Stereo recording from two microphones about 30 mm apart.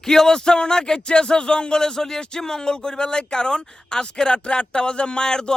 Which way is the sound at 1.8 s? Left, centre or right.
Centre.